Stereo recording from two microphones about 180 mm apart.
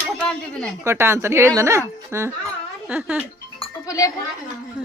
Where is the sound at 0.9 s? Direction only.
15° right (ahead or behind).